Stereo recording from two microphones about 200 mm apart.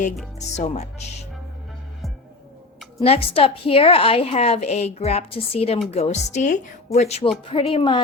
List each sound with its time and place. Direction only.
0.3 s a woman's voice: 35° left (ahead or behind)
3.0 s a woman's voice: 30° left (ahead or behind)